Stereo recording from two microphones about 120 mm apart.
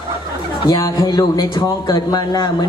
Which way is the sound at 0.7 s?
35° left (ahead or behind).